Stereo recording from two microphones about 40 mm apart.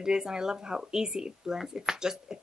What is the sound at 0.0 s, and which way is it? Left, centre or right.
A woman's voice, centre.